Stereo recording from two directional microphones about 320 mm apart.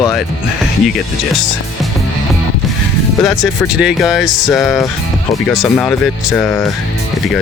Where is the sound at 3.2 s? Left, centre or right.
Centre.